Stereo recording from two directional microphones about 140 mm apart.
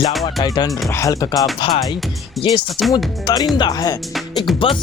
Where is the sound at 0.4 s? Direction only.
30° left (ahead or behind).